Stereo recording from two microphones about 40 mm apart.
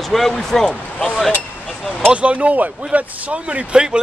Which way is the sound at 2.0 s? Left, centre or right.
Right.